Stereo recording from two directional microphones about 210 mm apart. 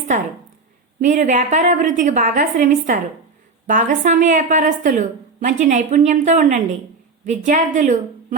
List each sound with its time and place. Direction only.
1.0 s a woman's voice: 35° right (ahead or behind)